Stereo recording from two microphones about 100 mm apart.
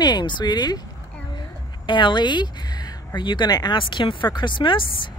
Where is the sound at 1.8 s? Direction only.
50° left (ahead or behind).